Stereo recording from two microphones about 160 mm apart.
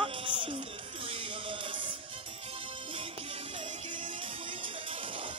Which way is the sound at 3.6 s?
30° right (ahead or behind).